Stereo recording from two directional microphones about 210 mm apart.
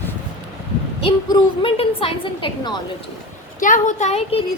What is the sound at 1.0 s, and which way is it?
A woman's voice, 25° left (ahead or behind).